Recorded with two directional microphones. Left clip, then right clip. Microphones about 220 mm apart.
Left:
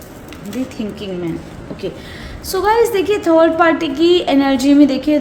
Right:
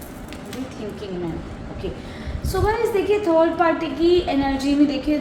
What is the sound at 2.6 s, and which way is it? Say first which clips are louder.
A woman's voice: left 7 dB; 55° left (ahead or behind).